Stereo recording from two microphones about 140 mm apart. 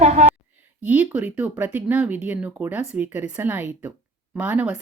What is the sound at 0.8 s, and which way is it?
Speech, 10° right (ahead or behind).